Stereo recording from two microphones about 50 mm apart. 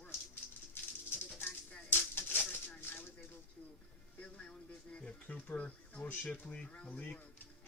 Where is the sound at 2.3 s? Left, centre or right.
Left.